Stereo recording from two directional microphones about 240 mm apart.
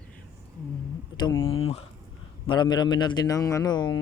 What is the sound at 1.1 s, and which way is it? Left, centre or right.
Speech, centre.